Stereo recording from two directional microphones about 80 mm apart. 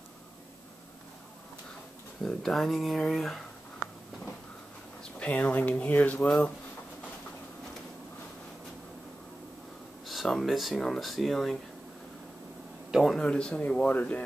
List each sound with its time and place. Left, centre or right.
2.2 s speech: centre
5.2 s speech: centre
10.0 s speech: centre
12.9 s a man's voice: centre
13.2 s speech: centre